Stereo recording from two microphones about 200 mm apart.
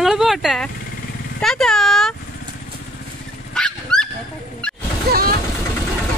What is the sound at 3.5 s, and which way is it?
Dog, 5° left (ahead or behind).